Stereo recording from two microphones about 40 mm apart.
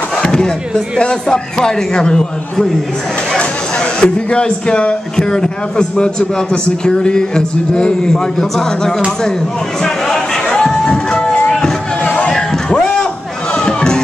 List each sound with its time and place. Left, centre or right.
0.2 s speech: centre
4.0 s a man's voice: left
9.8 s a sound: centre
10.9 s music: centre
12.3 s a sound: centre
13.6 s chatter: centre